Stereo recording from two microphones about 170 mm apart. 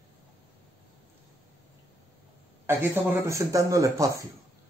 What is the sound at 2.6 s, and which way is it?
A man's voice, 15° right (ahead or behind).